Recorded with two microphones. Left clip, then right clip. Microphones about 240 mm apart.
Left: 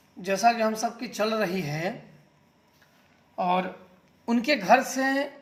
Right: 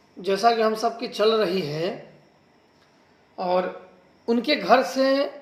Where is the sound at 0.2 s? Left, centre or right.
Left.